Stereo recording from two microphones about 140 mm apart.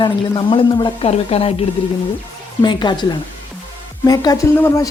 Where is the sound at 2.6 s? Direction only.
30° left (ahead or behind).